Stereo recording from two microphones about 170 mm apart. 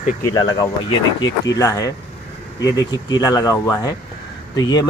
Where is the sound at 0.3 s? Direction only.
20° left (ahead or behind).